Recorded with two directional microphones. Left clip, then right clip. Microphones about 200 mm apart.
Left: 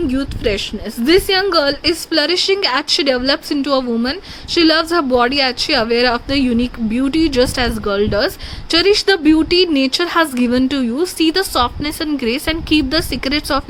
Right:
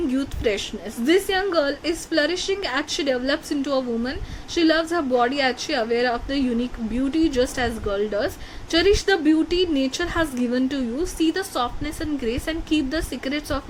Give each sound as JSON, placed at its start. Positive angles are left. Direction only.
{"t": 0.1, "sound": "a woman's voice", "side_deg": 20}